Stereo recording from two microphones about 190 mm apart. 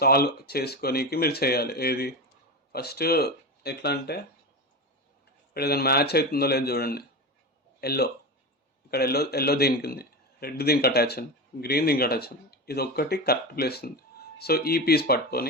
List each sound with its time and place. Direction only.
0.0 s a man's voice: 55° left (ahead or behind)
5.5 s a man's voice: 55° left (ahead or behind)